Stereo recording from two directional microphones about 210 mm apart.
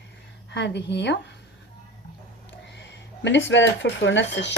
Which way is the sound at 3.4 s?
60° left (ahead or behind).